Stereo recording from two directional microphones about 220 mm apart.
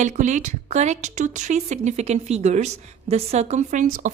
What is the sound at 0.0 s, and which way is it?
A woman's voice, 35° right (ahead or behind).